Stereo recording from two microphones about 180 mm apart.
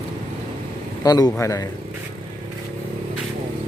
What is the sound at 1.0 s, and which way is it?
Speech, 20° left (ahead or behind).